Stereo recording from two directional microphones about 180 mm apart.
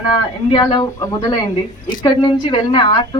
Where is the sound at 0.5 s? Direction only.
25° left (ahead or behind).